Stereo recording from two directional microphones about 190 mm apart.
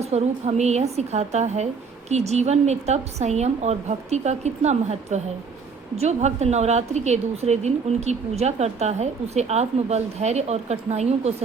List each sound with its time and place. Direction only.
0.0 s a woman's voice: 35° right (ahead or behind)